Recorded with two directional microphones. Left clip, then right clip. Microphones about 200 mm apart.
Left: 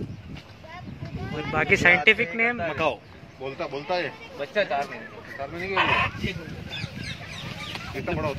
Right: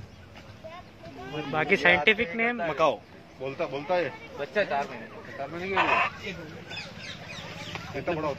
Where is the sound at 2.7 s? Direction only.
50° right (ahead or behind).